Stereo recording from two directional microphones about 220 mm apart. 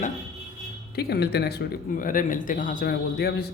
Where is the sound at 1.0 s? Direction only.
45° left (ahead or behind).